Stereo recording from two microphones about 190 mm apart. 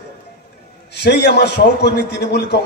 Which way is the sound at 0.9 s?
60° left (ahead or behind).